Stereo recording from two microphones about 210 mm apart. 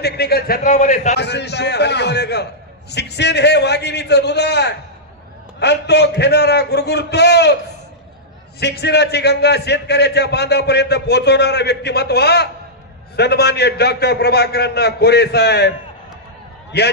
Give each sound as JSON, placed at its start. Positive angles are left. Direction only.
{"t": 0.0, "sound": "a man's voice", "side_deg": 50}
{"t": 1.1, "sound": "a man's voice", "side_deg": 55}
{"t": 8.5, "sound": "a man's voice", "side_deg": 50}